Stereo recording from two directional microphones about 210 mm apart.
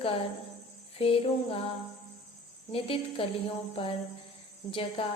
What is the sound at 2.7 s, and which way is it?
A woman's voice, 25° left (ahead or behind).